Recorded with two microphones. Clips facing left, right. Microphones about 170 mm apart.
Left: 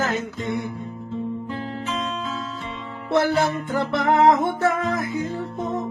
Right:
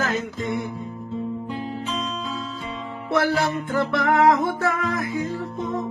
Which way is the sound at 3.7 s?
20° left (ahead or behind).